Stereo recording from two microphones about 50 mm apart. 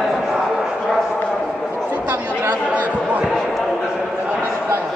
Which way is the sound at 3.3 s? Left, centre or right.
Centre.